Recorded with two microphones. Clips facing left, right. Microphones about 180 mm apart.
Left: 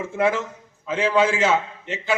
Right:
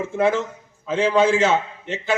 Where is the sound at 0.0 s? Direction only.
25° right (ahead or behind).